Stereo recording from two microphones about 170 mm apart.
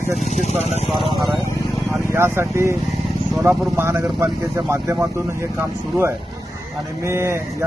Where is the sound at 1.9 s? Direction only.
15° right (ahead or behind).